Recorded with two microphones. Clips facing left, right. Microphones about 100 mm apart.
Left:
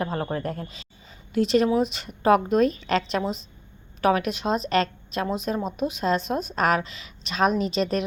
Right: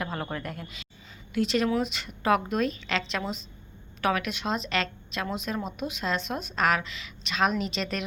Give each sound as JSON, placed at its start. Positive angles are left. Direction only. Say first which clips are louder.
{"t": 0.0, "sound": "a woman's voice", "louder": "left 6 dB", "side_deg": 35}